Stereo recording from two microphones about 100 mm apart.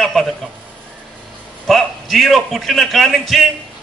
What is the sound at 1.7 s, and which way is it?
A man's voice, centre (ahead or behind).